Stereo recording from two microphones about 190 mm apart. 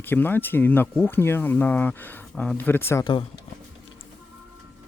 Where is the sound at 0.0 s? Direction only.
10° left (ahead or behind).